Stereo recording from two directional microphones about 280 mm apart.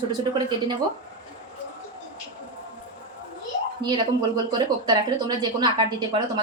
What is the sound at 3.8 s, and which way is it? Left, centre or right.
Speech, centre.